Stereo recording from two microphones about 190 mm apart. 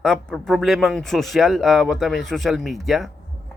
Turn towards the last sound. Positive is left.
turn(degrees=0)  # may be behind; listen again after turning